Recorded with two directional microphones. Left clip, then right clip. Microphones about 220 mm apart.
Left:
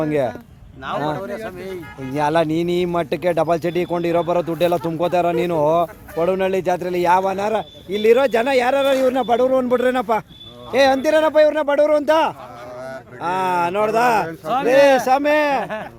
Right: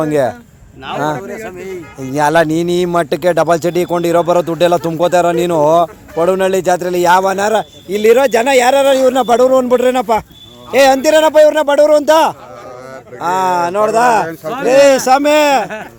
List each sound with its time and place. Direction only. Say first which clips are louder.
0.0 s a man's voice: right 6 dB; 15° right (ahead or behind)
1.3 s speech: right 3 dB; 20° left (ahead or behind)
2.0 s a man's voice: right 7 dB; 20° right (ahead or behind)
15.6 s speech: right 4 dB; 10° left (ahead or behind)